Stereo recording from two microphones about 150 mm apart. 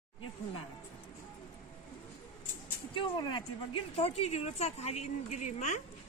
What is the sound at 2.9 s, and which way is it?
Speech, 30° left (ahead or behind).